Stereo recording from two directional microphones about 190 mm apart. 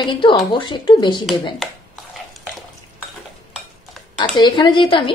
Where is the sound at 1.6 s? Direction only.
Centre (ahead or behind).